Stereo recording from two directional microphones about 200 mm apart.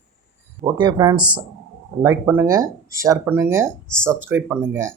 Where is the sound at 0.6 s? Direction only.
20° right (ahead or behind).